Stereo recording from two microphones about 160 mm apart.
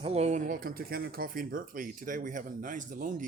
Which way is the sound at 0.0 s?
40° right (ahead or behind).